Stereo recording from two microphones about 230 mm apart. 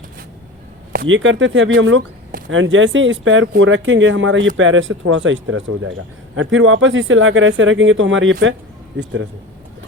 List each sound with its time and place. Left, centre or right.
0.9 s speech: right